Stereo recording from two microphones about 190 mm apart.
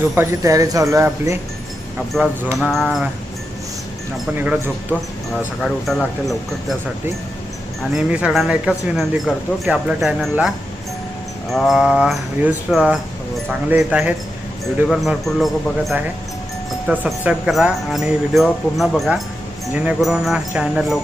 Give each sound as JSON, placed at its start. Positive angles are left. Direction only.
{"t": 0.2, "sound": "speech", "side_deg": -15}
{"t": 2.1, "sound": "speech", "side_deg": 5}
{"t": 4.4, "sound": "speech", "side_deg": -10}
{"t": 5.6, "sound": "speech", "side_deg": 0}
{"t": 7.8, "sound": "speech", "side_deg": -5}
{"t": 11.5, "sound": "speech", "side_deg": 0}